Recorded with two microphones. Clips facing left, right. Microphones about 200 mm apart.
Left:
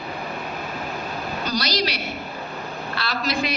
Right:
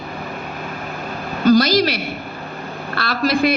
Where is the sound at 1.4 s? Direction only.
50° right (ahead or behind).